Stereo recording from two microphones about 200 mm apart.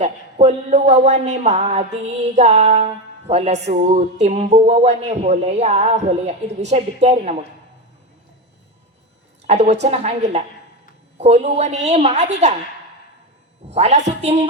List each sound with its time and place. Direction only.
0.0 s speech: 35° right (ahead or behind)
9.5 s speech: 35° right (ahead or behind)
13.7 s speech: 35° right (ahead or behind)